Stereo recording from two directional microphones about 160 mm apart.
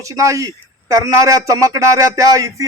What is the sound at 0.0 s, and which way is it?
A man's voice, 20° right (ahead or behind).